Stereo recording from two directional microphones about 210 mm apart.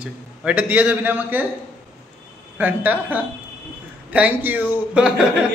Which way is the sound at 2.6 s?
10° right (ahead or behind).